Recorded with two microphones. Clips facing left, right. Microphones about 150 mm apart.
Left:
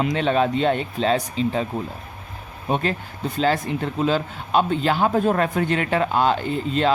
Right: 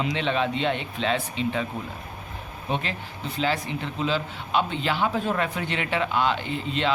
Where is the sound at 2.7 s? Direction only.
45° left (ahead or behind).